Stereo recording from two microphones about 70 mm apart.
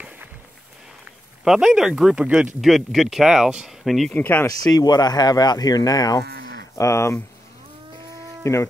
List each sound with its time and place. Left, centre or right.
1.4 s speech: centre
3.8 s speech: centre
4.1 s speech: left
4.5 s speech: left
6.7 s speech: left
8.4 s speech: left